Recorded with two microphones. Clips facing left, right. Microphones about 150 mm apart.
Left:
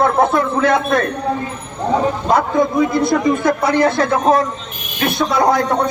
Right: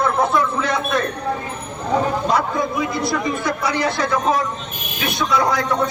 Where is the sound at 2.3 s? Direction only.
50° left (ahead or behind).